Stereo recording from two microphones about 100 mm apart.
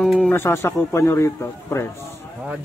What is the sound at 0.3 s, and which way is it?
Speech, 25° left (ahead or behind).